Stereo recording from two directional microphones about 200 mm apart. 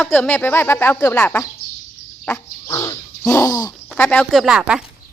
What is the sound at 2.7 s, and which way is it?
Bird, 15° left (ahead or behind).